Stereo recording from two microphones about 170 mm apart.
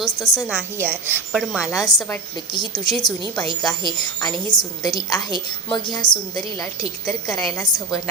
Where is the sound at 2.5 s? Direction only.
25° left (ahead or behind).